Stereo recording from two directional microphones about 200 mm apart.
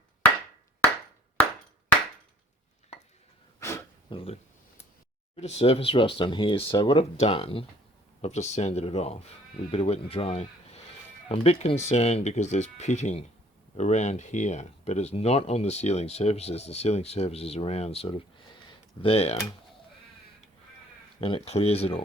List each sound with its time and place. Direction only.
4.1 s speech: 30° left (ahead or behind)
5.4 s speech: 30° left (ahead or behind)
21.2 s speech: 30° left (ahead or behind)